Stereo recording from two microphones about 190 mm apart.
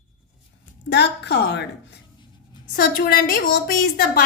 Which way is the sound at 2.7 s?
50° left (ahead or behind).